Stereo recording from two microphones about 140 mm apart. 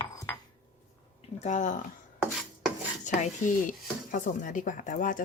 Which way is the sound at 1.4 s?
60° left (ahead or behind).